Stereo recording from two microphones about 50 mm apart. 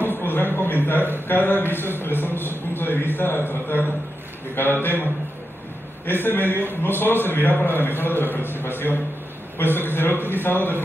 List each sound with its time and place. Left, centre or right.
0.1 s a sound: left
1.2 s a man's voice: left
6.0 s a man's voice: left